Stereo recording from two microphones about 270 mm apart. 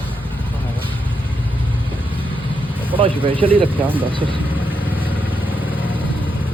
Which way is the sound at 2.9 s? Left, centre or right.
Centre.